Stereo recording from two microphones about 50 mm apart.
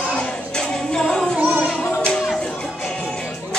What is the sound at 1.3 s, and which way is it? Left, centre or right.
Music, right.